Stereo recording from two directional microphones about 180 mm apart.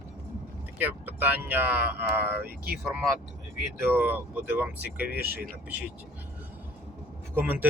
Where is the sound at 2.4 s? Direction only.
60° right (ahead or behind).